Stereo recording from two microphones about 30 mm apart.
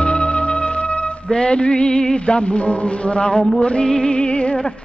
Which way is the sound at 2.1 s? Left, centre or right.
Left.